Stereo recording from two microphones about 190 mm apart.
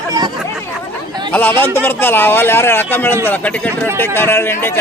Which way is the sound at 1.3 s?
10° left (ahead or behind).